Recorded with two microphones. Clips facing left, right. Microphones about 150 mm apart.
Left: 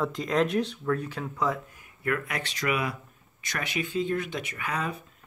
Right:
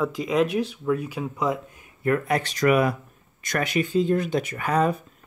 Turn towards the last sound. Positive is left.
turn(degrees=-40)  # may be behind; listen again after turning